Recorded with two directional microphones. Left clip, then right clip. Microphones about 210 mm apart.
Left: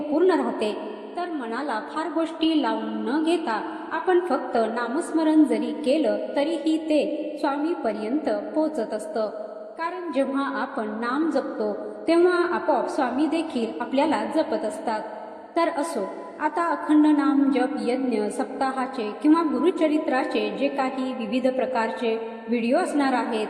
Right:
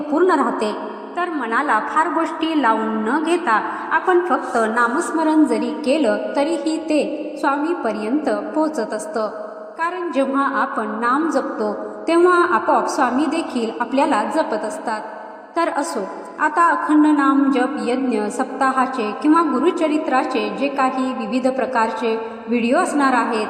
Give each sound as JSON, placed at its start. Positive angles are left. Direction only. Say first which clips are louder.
{"t": 0.1, "sound": "a sound", "louder": "right 5 dB", "side_deg": -25}
{"t": 1.2, "sound": "a woman's voice", "louder": "right 9 dB", "side_deg": -20}
{"t": 4.3, "sound": "a woman's voice", "louder": "right 5 dB", "side_deg": -20}
{"t": 9.8, "sound": "a woman's voice", "louder": "right 6 dB", "side_deg": -20}